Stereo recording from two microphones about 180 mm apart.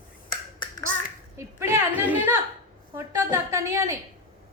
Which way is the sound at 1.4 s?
15° right (ahead or behind).